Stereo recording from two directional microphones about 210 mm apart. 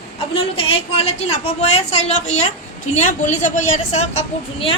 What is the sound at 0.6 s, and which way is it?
A woman's voice, 30° left (ahead or behind).